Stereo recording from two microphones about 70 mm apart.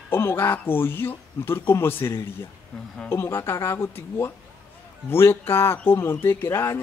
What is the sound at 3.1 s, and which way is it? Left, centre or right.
Speech, left.